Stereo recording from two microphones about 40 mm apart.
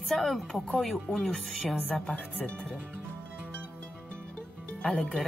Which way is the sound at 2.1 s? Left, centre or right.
Left.